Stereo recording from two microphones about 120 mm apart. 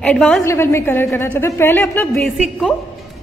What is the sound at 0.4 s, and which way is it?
A woman's voice, 20° left (ahead or behind).